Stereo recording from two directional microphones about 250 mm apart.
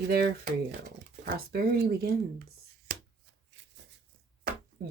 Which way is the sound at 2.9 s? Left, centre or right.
Right.